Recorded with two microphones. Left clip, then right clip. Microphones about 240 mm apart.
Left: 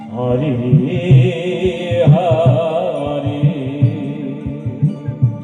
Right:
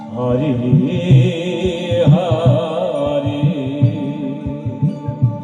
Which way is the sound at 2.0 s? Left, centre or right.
Right.